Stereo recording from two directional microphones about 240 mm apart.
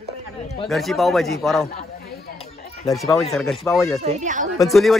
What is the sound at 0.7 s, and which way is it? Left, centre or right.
Speech, centre.